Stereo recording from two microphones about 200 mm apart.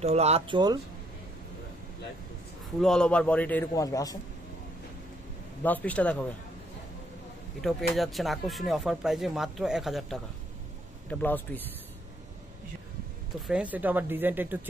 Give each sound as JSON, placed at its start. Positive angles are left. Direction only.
{"t": 0.0, "sound": "speech", "side_deg": -30}
{"t": 2.8, "sound": "a man's voice", "side_deg": 5}
{"t": 5.6, "sound": "a man's voice", "side_deg": 10}
{"t": 7.9, "sound": "a man's voice", "side_deg": 0}
{"t": 13.5, "sound": "speech", "side_deg": -5}